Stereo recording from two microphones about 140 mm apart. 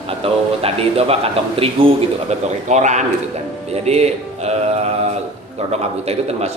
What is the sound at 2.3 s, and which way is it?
A man's voice, 55° right (ahead or behind).